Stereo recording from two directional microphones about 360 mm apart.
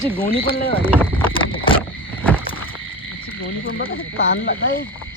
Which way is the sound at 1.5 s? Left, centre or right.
Centre.